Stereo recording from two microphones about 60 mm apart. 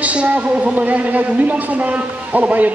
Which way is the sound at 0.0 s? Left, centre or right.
Right.